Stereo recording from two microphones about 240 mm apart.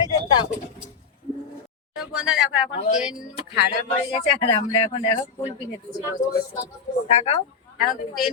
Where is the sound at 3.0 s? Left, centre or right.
Centre.